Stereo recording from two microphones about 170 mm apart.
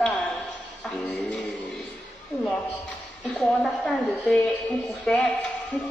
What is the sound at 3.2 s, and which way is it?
A woman's voice, 5° left (ahead or behind).